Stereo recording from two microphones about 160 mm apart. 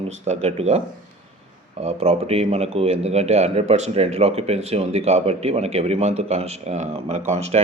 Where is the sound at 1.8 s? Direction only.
45° right (ahead or behind).